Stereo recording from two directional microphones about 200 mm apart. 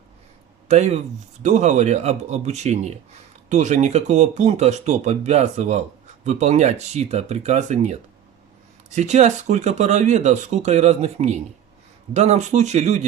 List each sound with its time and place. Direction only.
0.7 s speech: 35° right (ahead or behind)